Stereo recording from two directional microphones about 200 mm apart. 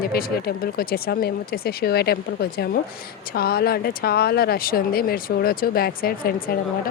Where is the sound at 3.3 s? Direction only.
50° left (ahead or behind).